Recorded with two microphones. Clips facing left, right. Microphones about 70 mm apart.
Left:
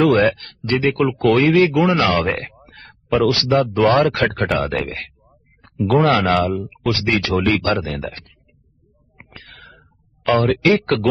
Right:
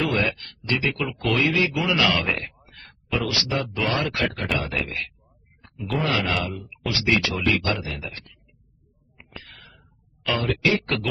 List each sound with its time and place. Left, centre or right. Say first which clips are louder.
0.0 s speech: left 10 dB; left
9.1 s a sound: left 2 dB; left
10.2 s speech: left 8 dB; left